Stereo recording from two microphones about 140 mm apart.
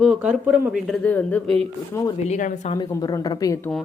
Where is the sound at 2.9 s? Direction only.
25° left (ahead or behind).